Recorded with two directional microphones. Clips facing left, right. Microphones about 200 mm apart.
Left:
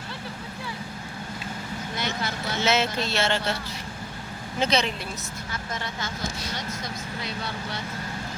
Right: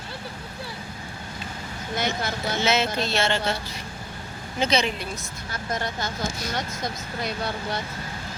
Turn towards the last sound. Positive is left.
turn(degrees=-45)  # may be behind; listen again after turning